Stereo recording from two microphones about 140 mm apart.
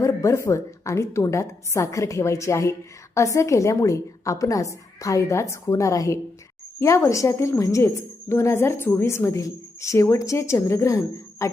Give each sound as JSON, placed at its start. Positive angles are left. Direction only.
{"t": 0.0, "sound": "a woman's voice", "side_deg": 20}